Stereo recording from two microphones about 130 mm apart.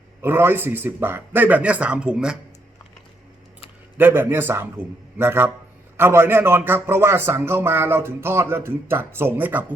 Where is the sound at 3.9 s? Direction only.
15° right (ahead or behind).